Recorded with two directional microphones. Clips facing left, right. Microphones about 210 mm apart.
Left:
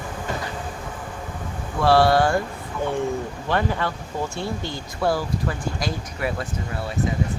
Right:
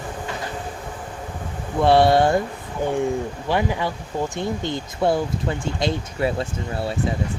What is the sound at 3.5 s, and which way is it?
Speech, 15° right (ahead or behind).